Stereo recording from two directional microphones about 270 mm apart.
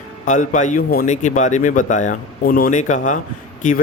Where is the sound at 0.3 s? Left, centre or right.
Left.